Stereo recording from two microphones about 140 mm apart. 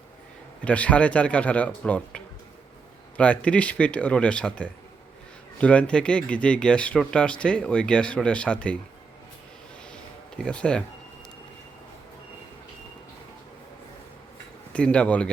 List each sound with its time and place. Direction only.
0.6 s speech: 10° left (ahead or behind)
9.9 s a sound: 5° left (ahead or behind)
14.7 s speech: 10° left (ahead or behind)